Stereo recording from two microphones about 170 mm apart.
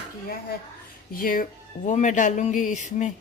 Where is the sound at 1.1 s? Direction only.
55° left (ahead or behind).